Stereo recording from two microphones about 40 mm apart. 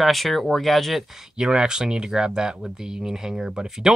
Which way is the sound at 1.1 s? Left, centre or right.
Centre.